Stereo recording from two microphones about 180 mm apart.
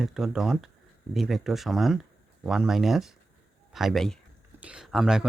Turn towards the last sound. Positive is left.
turn(degrees=0)  # may be behind; listen again after turning